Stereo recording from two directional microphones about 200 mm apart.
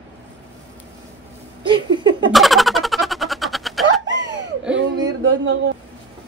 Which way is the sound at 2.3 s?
Centre (ahead or behind).